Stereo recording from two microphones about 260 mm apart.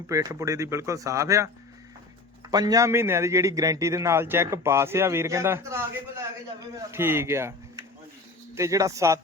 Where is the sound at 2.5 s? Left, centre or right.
Centre.